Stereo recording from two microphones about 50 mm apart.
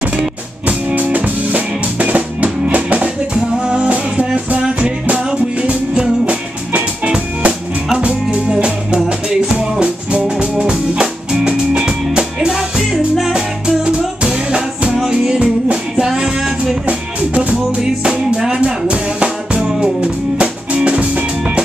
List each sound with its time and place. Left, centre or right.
0.7 s drum kit: right
4.6 s music: right
16.8 s music: right
17.8 s music: centre